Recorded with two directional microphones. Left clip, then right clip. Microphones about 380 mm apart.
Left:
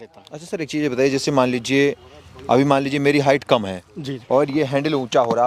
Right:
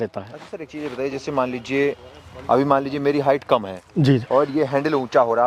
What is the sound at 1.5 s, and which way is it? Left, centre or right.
Speech, left.